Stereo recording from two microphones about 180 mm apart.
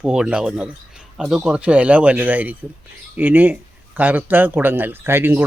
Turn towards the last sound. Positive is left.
turn(degrees=-10)  # may be behind; listen again after turning